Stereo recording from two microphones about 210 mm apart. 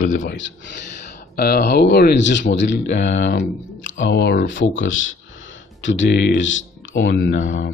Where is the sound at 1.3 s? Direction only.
45° left (ahead or behind).